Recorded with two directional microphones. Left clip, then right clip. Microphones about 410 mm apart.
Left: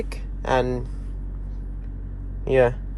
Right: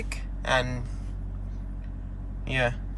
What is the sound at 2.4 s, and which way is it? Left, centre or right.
Speech, centre.